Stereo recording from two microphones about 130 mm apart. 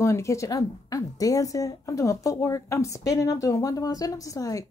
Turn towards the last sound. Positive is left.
turn(degrees=25)  # may be behind; listen again after turning